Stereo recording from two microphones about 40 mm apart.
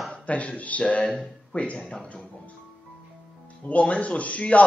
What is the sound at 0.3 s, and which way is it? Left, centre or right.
Speech, left.